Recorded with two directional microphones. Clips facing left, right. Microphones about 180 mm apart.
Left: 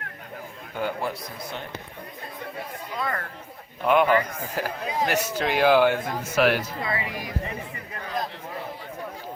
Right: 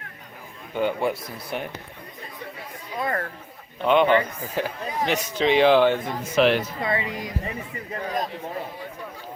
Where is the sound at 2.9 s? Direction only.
25° right (ahead or behind).